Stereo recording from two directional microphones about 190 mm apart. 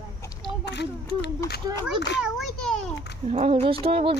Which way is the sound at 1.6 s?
20° right (ahead or behind).